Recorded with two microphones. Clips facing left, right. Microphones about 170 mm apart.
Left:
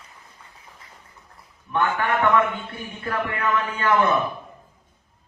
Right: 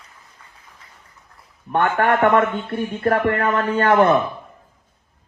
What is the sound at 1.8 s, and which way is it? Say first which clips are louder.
Speech: right 5 dB; 75° right (ahead or behind).